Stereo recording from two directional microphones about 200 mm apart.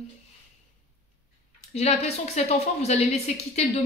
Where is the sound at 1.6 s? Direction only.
35° left (ahead or behind).